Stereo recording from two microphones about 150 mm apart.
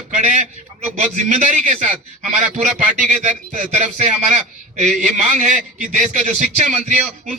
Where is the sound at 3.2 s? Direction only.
55° right (ahead or behind).